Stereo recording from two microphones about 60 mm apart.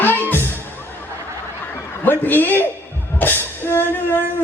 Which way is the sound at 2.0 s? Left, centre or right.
Left.